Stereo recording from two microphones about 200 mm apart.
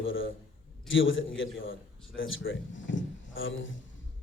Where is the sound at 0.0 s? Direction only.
75° left (ahead or behind).